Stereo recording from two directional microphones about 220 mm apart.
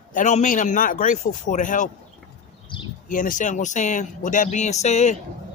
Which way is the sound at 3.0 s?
35° left (ahead or behind).